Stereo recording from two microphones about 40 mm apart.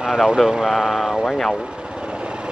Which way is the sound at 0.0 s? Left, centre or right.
Centre.